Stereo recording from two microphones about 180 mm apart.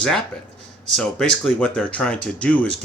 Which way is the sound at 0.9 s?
5° left (ahead or behind).